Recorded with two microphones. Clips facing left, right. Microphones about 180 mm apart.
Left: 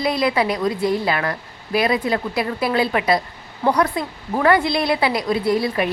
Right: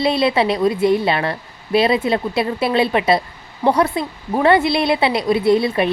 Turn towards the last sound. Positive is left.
turn(degrees=-25)  # may be behind; listen again after turning